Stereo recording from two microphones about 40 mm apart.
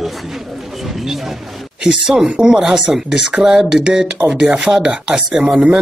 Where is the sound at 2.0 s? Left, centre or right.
Centre.